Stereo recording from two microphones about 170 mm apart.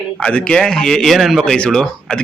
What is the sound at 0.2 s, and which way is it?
Speech, 5° left (ahead or behind).